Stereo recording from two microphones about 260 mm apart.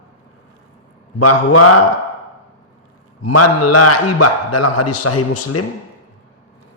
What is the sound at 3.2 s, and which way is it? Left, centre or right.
A man's voice, left.